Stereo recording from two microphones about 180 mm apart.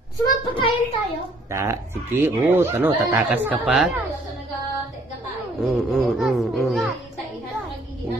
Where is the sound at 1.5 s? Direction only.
15° right (ahead or behind).